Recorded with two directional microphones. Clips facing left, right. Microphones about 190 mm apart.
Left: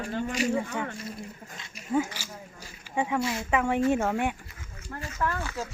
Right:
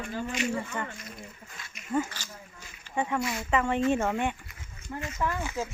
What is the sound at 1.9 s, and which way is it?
A woman's voice, 10° left (ahead or behind).